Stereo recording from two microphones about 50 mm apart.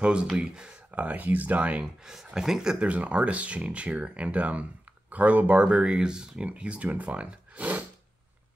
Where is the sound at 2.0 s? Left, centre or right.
Centre.